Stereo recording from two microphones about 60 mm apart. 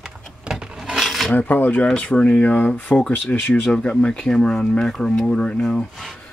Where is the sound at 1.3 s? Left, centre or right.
Left.